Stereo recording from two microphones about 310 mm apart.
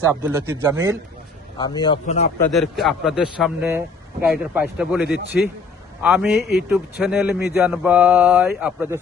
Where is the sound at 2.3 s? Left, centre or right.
Centre.